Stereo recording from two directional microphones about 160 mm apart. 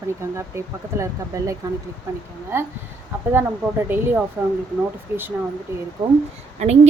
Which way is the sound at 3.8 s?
15° right (ahead or behind).